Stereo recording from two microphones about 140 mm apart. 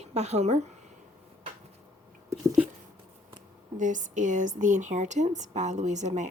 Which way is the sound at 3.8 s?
65° right (ahead or behind).